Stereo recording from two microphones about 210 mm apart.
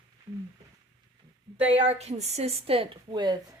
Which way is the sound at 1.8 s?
30° right (ahead or behind).